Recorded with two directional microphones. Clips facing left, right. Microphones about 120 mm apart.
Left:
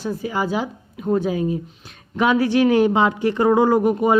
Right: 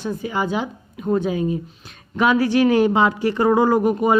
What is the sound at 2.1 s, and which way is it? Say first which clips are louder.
A woman's voice: even; 20° left (ahead or behind).